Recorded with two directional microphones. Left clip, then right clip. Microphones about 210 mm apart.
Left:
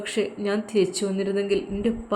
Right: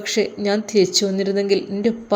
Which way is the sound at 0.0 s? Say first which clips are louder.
Right 6 dB; 15° right (ahead or behind).